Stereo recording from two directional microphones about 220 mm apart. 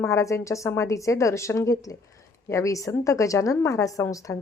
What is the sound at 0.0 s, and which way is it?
A woman's voice, 15° left (ahead or behind).